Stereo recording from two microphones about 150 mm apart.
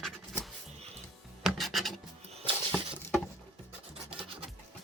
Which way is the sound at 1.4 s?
Centre (ahead or behind).